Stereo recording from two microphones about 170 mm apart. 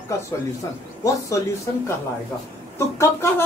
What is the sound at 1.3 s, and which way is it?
Speech, 20° left (ahead or behind).